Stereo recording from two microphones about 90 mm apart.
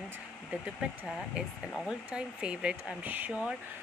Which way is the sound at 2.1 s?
10° right (ahead or behind).